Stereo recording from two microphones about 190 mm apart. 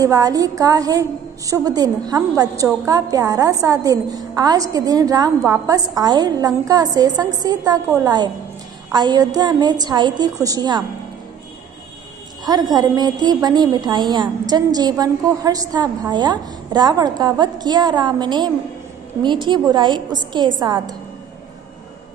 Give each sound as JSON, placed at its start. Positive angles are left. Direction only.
{"t": 0.0, "sound": "a woman's voice", "side_deg": -20}
{"t": 12.7, "sound": "a woman's voice", "side_deg": -20}